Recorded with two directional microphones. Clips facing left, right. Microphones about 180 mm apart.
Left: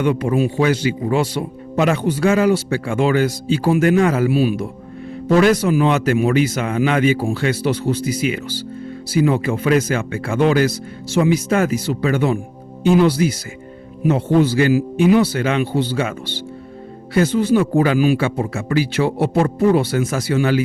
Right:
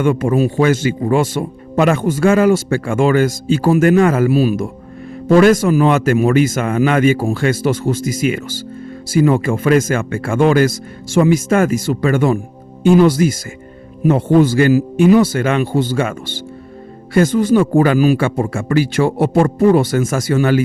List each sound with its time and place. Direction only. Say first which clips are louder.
0.0 s a man's voice: right 3 dB; 50° right (ahead or behind)